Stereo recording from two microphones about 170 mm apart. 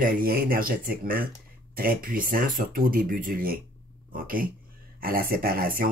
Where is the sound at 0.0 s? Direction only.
60° right (ahead or behind).